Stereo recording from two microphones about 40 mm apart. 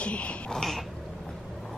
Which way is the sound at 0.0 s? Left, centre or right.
Left.